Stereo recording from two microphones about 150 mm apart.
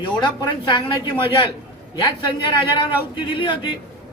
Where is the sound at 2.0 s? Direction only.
30° left (ahead or behind).